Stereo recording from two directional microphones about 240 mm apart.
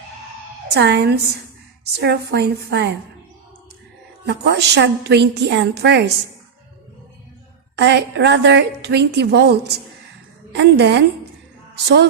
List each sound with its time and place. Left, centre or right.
0.7 s a woman's voice: right
4.3 s a woman's voice: right
7.8 s a woman's voice: right